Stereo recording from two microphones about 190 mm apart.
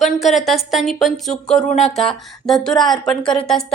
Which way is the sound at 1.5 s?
35° left (ahead or behind).